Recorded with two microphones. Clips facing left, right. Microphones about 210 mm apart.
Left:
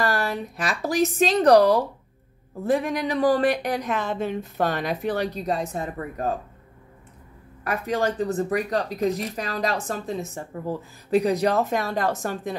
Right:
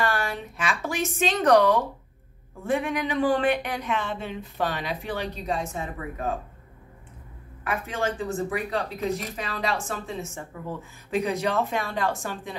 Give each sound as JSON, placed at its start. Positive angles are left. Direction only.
{"t": 0.0, "sound": "speech", "side_deg": 40}
{"t": 7.6, "sound": "speech", "side_deg": 40}